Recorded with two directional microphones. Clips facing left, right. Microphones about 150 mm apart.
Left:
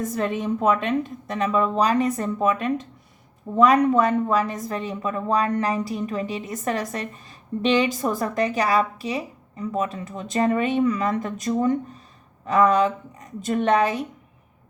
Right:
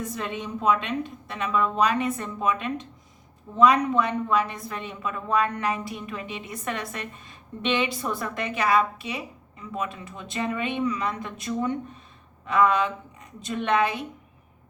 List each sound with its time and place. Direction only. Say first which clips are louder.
0.0 s a woman's voice: left 7 dB; 45° left (ahead or behind)